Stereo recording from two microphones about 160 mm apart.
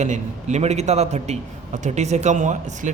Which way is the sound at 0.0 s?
45° right (ahead or behind).